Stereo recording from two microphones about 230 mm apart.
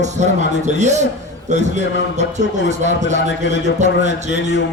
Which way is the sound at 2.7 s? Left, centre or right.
Right.